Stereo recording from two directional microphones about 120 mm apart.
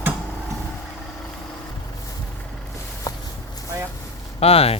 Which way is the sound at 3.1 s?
30° left (ahead or behind).